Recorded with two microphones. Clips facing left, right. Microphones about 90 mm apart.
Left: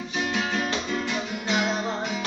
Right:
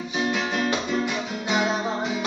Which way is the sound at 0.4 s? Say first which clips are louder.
Right 2 dB; 15° right (ahead or behind).